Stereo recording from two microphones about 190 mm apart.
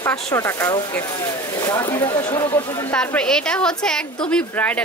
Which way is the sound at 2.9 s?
5° left (ahead or behind).